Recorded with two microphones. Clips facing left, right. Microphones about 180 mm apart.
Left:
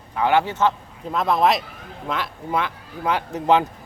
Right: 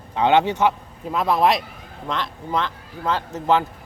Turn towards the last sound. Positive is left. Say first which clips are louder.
# left 2 dB
turn(degrees=15)  # may be behind; listen again after turning